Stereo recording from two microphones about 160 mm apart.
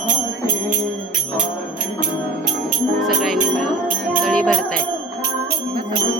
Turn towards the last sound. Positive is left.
turn(degrees=5)  # may be behind; listen again after turning